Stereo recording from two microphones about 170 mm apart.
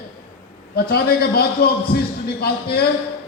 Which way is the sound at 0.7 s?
65° left (ahead or behind).